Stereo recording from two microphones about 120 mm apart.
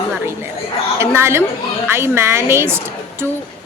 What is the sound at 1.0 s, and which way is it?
A woman's voice, 20° right (ahead or behind).